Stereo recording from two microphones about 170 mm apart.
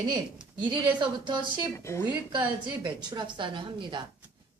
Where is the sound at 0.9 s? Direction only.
25° right (ahead or behind).